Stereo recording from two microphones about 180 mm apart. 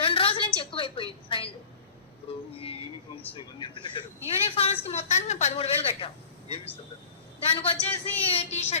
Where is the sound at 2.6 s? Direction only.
30° left (ahead or behind).